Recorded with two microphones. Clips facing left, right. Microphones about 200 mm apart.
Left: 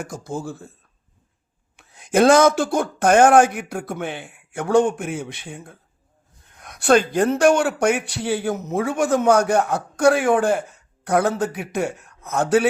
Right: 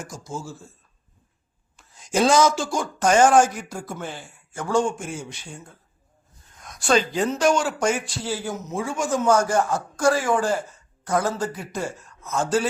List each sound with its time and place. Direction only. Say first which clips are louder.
0.0 s a man's voice: left 5 dB; 60° left (ahead or behind)
1.7 s a man's voice: left 5 dB; 60° left (ahead or behind)